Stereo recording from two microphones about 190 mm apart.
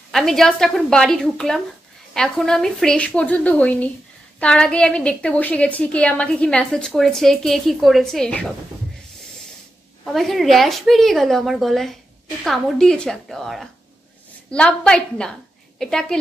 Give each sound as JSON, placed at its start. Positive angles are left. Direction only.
{"t": 0.1, "sound": "a woman's voice", "side_deg": 0}
{"t": 10.0, "sound": "a woman's voice", "side_deg": 0}